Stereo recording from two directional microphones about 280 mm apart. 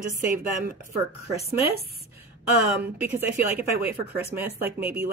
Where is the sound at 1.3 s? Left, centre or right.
Left.